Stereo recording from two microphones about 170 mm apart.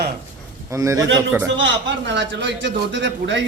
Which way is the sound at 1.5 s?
90° right.